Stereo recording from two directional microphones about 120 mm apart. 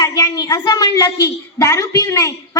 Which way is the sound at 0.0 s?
35° left (ahead or behind).